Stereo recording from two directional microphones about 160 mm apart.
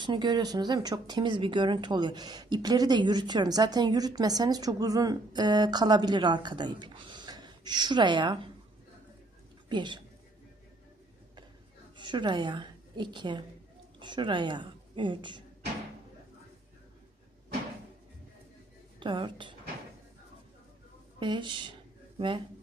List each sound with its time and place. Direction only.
0.0 s speech: 30° right (ahead or behind)
9.6 s speech: 30° right (ahead or behind)
11.9 s a woman's voice: 30° right (ahead or behind)
18.9 s a woman's voice: 30° right (ahead or behind)
21.2 s speech: 30° right (ahead or behind)